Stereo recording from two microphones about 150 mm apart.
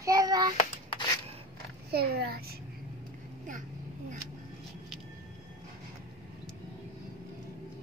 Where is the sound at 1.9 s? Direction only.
90° right.